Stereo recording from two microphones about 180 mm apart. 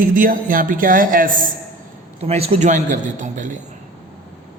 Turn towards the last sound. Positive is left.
turn(degrees=-45)  # may be behind; listen again after turning